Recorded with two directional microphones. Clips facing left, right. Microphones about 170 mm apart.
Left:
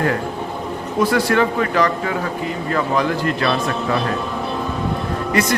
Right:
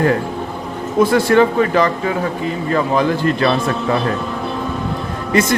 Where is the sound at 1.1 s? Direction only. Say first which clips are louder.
Right 5 dB; 25° right (ahead or behind).